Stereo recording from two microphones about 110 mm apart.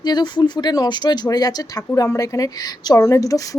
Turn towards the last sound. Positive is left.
turn(degrees=30)  # may be behind; listen again after turning